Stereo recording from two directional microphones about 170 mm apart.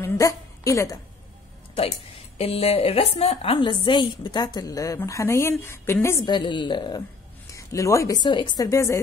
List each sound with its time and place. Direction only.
0.0 s a sound: 20° left (ahead or behind)
1.8 s a woman's voice: 35° left (ahead or behind); by 6.2 s 15° left (ahead or behind)
6.2 s a woman's voice: 25° left (ahead or behind)